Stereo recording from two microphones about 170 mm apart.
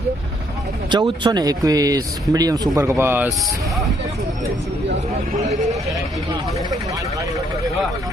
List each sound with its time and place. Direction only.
0.9 s speech: 25° right (ahead or behind)